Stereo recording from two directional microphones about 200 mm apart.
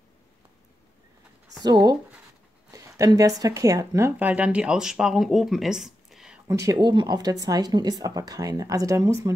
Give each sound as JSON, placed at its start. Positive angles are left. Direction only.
{"t": 1.6, "sound": "speech", "side_deg": -20}
{"t": 6.4, "sound": "speech", "side_deg": -15}